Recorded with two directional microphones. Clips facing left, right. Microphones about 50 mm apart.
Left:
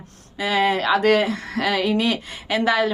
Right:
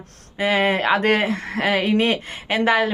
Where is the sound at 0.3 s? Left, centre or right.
Right.